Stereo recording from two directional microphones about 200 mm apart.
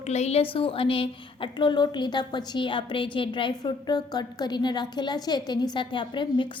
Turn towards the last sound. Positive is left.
turn(degrees=25)  # may be behind; listen again after turning